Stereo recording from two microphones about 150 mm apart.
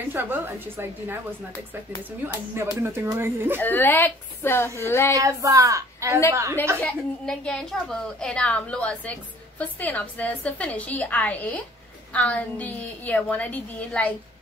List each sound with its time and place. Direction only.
0.1 s a woman's voice: 15° right (ahead or behind)
2.2 s a woman's voice: 15° right (ahead or behind)
3.6 s a woman's voice: 15° left (ahead or behind)
5.1 s speech: 20° right (ahead or behind)
6.8 s a woman's voice: 5° left (ahead or behind)